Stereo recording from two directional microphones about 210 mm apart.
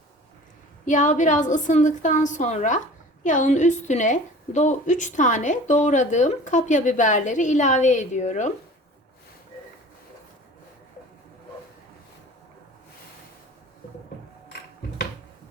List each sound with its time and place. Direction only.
0.9 s a woman's voice: 35° left (ahead or behind)